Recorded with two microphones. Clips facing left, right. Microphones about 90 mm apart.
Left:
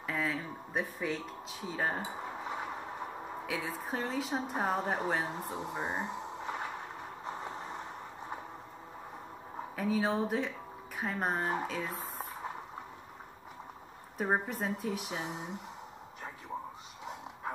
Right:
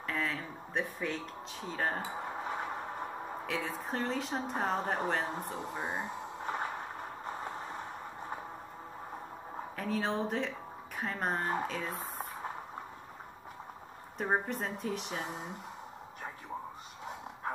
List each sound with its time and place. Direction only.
0.0 s a sound: 5° left (ahead or behind)
3.4 s speech: 5° left (ahead or behind)
6.4 s a sound: 40° right (ahead or behind)
7.2 s vehicle: centre (ahead or behind)
9.8 s speech: 5° left (ahead or behind)
14.1 s speech: 5° left (ahead or behind)